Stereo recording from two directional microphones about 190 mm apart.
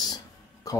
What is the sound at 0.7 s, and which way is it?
Music, 20° left (ahead or behind).